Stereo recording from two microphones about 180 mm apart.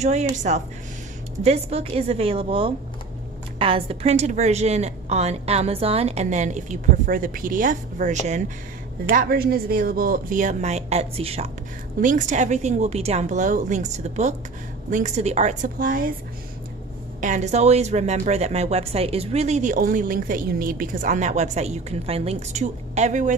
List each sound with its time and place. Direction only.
0.0 s speech: 40° right (ahead or behind)
1.4 s speech: 35° right (ahead or behind)
9.1 s speech: 55° right (ahead or behind); by 11.5 s 35° right (ahead or behind)
12.0 s speech: 45° right (ahead or behind)
17.2 s speech: 40° right (ahead or behind)